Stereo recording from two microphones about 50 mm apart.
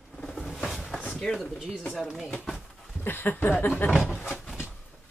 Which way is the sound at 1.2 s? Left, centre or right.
Centre.